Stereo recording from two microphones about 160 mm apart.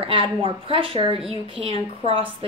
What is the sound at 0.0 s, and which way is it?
A woman's voice, 35° right (ahead or behind).